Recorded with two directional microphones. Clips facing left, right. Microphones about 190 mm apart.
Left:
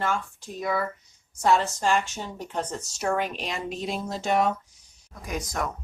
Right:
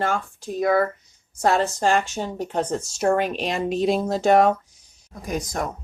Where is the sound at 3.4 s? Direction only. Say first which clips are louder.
Right 9 dB; 75° right (ahead or behind).